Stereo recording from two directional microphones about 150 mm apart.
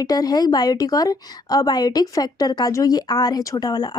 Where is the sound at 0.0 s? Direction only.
25° left (ahead or behind).